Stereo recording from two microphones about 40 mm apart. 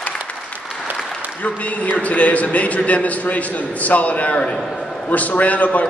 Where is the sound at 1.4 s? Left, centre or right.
Left.